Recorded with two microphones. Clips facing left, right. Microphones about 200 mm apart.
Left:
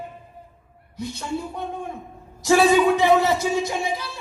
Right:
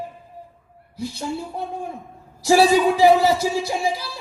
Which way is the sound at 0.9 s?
30° right (ahead or behind).